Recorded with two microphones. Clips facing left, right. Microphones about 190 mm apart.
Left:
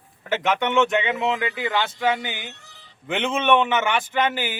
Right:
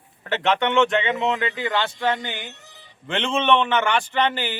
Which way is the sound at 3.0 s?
15° left (ahead or behind).